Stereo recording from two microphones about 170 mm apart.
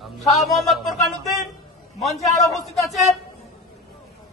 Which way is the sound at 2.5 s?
Centre (ahead or behind).